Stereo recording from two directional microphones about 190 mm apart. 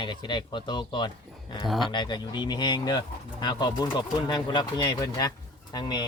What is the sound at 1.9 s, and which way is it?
Speech, 25° left (ahead or behind).